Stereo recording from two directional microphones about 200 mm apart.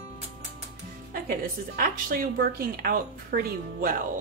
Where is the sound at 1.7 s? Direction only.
45° right (ahead or behind).